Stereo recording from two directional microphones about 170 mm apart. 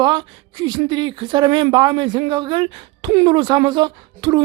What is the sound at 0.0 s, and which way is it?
Speech, 25° right (ahead or behind).